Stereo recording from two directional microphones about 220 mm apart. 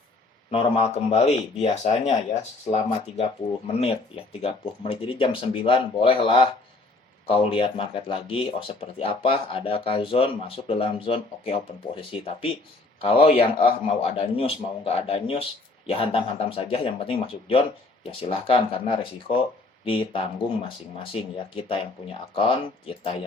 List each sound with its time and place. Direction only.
0.5 s speech: 25° left (ahead or behind)
3.8 s speech: 25° left (ahead or behind)